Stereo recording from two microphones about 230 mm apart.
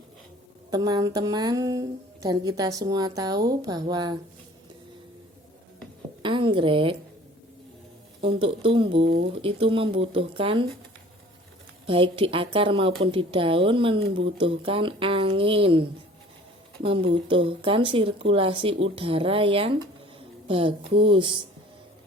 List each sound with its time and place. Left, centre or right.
0.7 s a woman's voice: centre
6.2 s a sound: right
8.2 s a woman's voice: right
11.9 s a woman's voice: right